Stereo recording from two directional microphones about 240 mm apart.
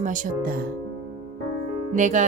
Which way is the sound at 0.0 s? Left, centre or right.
Right.